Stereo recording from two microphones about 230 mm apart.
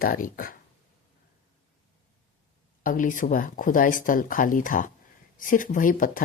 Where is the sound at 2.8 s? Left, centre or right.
Left.